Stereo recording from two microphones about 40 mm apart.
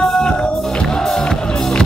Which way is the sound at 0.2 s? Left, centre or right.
Left.